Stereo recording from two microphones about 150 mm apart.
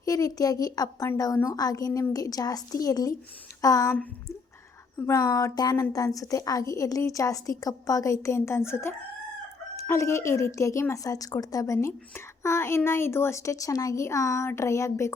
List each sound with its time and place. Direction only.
0.0 s speech: 25° left (ahead or behind)
4.9 s speech: 20° left (ahead or behind)